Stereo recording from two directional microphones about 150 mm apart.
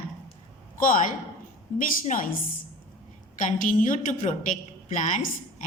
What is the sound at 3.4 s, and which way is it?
A woman's voice, 60° left (ahead or behind).